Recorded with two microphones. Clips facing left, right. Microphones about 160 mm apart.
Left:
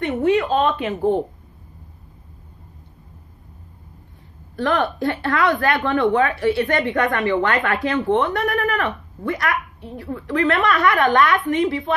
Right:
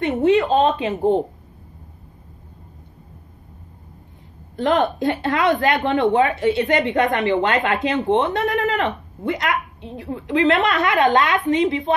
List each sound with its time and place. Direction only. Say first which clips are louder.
0.0 s a woman's voice: right 2 dB; 25° right (ahead or behind)
4.6 s a woman's voice: right 2 dB; 20° right (ahead or behind)